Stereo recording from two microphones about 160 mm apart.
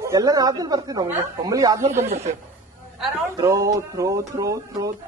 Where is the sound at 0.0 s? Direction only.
20° right (ahead or behind).